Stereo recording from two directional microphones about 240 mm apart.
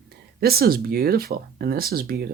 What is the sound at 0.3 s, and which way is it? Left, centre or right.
Speech, right.